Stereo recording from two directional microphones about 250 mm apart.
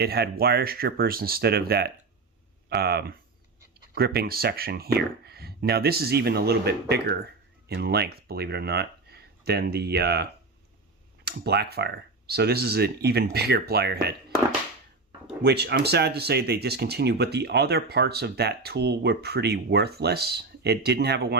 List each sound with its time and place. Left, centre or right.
0.0 s speech: right
11.3 s speech: right
15.4 s speech: right